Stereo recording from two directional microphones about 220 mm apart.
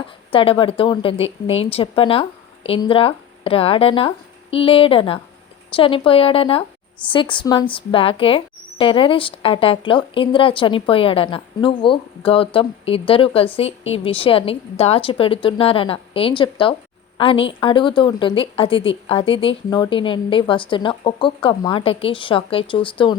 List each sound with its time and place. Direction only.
0.3 s speech: 25° left (ahead or behind)